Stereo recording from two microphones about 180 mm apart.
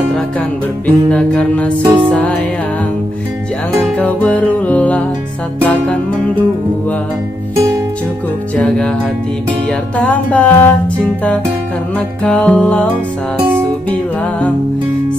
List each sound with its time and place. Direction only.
0.8 s music: 5° left (ahead or behind)
1.8 s music: 20° right (ahead or behind)
2.0 s music: 5° left (ahead or behind)
3.8 s music: 5° left (ahead or behind)
8.5 s music: 5° left (ahead or behind)
12.2 s music: 5° left (ahead or behind)